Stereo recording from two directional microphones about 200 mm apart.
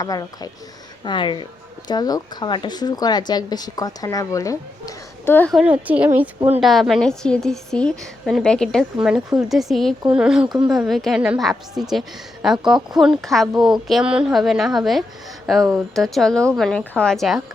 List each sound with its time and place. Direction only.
0.0 s speech: 20° left (ahead or behind)
5.5 s a woman's voice: 5° right (ahead or behind)